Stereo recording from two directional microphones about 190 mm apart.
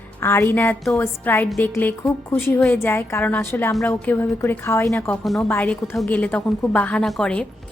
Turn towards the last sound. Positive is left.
turn(degrees=5)  # may be behind; listen again after turning